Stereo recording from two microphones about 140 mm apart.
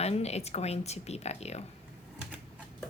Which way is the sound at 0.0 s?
50° left (ahead or behind).